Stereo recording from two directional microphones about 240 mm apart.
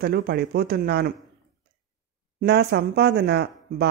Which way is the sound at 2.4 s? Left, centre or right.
Right.